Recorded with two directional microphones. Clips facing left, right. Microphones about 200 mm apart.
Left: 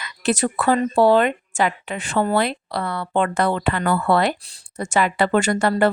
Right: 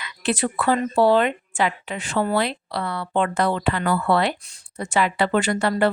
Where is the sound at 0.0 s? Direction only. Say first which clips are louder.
Left 3 dB; 45° left (ahead or behind).